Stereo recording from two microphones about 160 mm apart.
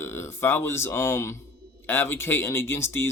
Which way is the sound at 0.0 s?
15° left (ahead or behind).